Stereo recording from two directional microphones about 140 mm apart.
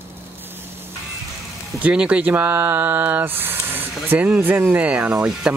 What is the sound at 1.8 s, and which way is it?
Speech, 10° right (ahead or behind).